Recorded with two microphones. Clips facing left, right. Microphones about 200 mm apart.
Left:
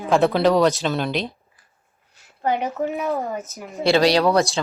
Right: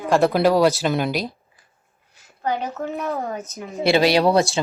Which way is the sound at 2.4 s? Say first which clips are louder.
Left 3 dB; 20° left (ahead or behind).